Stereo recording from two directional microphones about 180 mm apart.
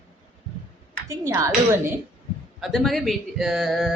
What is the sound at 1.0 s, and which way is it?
Speech, 15° right (ahead or behind).